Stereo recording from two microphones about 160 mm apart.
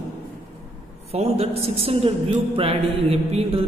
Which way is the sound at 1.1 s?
40° right (ahead or behind).